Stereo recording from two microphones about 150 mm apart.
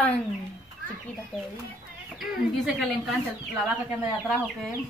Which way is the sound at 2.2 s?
Centre (ahead or behind).